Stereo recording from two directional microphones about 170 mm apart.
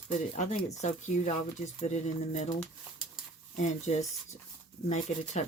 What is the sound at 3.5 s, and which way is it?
Speech, 45° left (ahead or behind).